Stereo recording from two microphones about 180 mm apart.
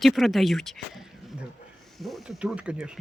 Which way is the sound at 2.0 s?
Centre (ahead or behind).